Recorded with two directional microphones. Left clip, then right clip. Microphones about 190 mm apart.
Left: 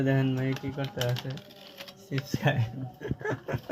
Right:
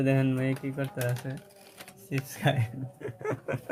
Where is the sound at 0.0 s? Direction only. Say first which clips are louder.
Right 1 dB; 15° right (ahead or behind).